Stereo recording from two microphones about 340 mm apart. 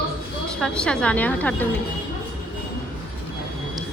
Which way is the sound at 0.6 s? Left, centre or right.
Centre.